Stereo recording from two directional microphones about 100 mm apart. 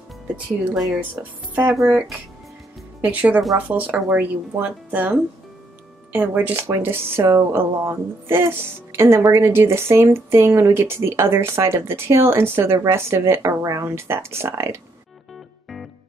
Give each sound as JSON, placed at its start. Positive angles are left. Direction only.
{"t": 0.7, "sound": "a woman's voice", "side_deg": 0}
{"t": 1.5, "sound": "speech", "side_deg": -15}
{"t": 3.0, "sound": "speech", "side_deg": -15}
{"t": 15.3, "sound": "music", "side_deg": 0}